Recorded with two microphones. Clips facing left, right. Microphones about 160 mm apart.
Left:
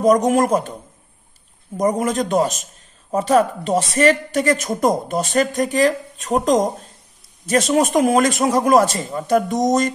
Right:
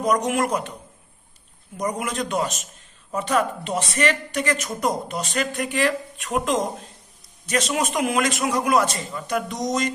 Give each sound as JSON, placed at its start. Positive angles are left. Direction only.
{"t": 0.0, "sound": "a woman's voice", "side_deg": 45}
{"t": 1.8, "sound": "a woman's voice", "side_deg": 45}